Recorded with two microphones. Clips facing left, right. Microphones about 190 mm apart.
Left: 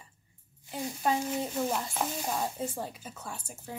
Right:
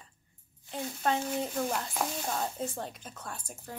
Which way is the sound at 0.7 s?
10° left (ahead or behind).